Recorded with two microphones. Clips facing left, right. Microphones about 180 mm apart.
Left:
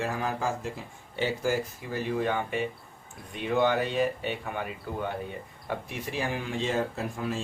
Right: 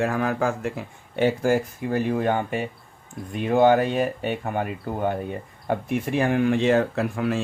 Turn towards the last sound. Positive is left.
turn(degrees=-70)  # may be behind; listen again after turning